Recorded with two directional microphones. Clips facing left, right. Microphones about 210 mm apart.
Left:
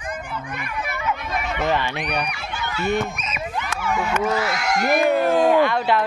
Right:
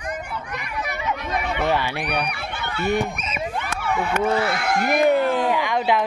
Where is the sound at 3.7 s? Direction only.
55° right (ahead or behind).